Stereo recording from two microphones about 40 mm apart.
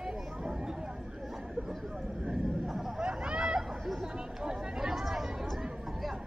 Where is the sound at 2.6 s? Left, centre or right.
Centre.